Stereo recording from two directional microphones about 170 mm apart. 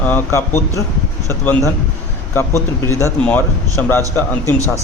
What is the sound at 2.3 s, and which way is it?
Speech, 15° left (ahead or behind).